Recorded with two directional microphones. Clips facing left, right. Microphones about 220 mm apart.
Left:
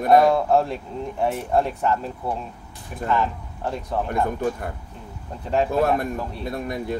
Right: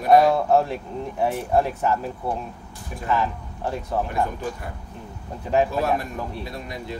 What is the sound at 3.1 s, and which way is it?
Speech, 5° right (ahead or behind).